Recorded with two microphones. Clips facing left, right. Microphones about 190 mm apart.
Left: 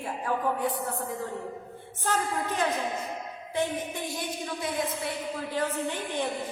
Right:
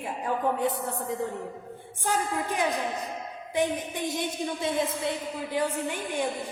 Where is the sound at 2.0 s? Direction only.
10° right (ahead or behind).